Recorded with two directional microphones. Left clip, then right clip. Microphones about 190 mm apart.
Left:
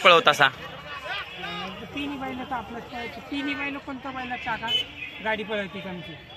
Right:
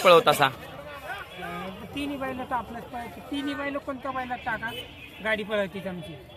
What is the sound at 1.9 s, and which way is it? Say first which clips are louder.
Speech: right 1 dB; 20° right (ahead or behind).